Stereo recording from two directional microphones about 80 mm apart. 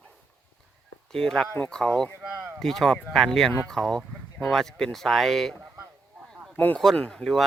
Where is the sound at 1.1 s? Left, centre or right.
Centre.